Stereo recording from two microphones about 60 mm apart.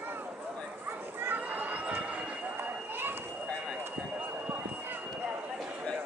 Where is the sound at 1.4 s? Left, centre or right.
Right.